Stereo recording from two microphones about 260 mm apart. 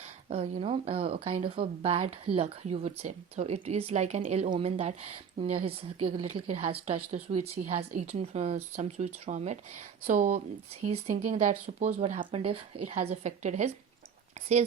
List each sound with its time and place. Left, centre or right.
0.3 s speech: right